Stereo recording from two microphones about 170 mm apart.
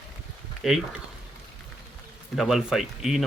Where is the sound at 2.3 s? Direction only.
Centre (ahead or behind).